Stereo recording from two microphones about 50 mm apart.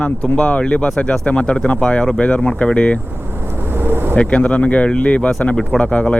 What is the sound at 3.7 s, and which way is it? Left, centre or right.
Vehicle, right.